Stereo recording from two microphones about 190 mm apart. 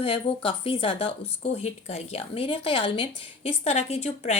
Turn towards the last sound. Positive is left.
turn(degrees=35)  # may be behind; listen again after turning